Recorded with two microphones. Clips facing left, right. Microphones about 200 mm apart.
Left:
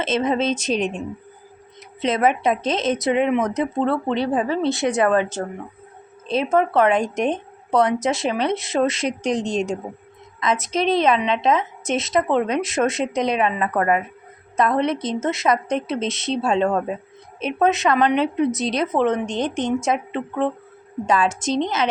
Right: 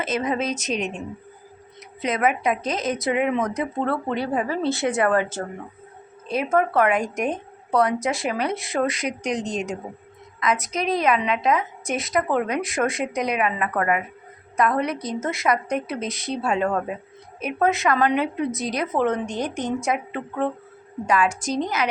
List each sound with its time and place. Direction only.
0.0 s a woman's voice: 25° left (ahead or behind)
2.0 s a woman's voice: 25° left (ahead or behind)